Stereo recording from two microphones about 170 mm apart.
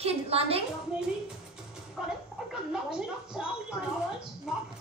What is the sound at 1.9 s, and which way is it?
Speech, 5° right (ahead or behind).